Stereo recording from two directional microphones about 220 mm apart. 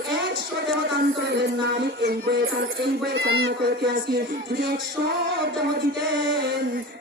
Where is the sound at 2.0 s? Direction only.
45° right (ahead or behind).